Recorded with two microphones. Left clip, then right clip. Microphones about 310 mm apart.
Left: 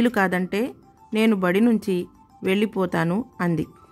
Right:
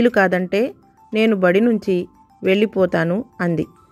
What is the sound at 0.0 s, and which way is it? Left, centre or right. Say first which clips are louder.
Speech: right 6 dB; centre.